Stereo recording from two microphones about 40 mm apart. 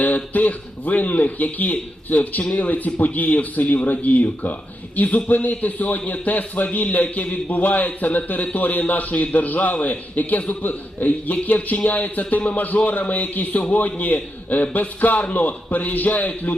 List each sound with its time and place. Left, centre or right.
0.0 s a man's voice: left